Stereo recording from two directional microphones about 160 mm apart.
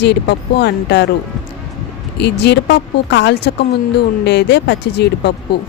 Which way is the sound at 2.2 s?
90° left.